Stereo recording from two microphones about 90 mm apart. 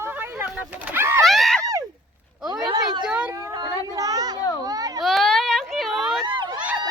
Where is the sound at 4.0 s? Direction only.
40° right (ahead or behind).